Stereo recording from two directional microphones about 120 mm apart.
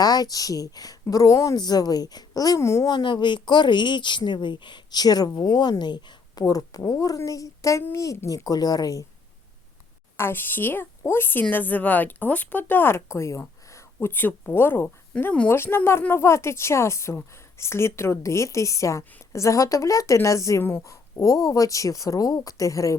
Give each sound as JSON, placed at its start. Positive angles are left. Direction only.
{"t": 0.0, "sound": "a woman's voice", "side_deg": 30}
{"t": 2.9, "sound": "a woman's voice", "side_deg": 40}
{"t": 10.2, "sound": "a woman's voice", "side_deg": 20}